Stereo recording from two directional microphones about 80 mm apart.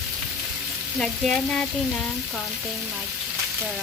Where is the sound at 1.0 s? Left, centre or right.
Centre.